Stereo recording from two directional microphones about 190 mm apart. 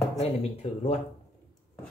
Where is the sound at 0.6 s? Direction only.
35° left (ahead or behind).